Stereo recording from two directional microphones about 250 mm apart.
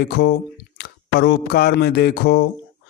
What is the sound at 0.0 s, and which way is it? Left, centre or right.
A man's voice, left.